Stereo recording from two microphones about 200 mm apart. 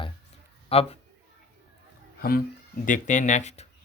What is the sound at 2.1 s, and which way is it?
Speech, 50° left (ahead or behind).